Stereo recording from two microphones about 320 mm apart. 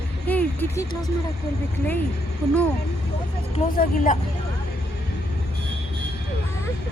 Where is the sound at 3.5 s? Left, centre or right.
Left.